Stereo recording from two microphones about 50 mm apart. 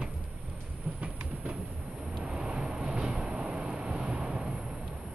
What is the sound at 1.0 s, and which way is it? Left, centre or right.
Train, right.